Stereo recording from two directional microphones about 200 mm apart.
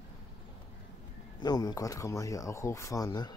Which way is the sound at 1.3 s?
20° left (ahead or behind).